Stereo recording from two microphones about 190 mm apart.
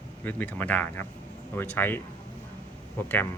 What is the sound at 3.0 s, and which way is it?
Speech, 10° left (ahead or behind).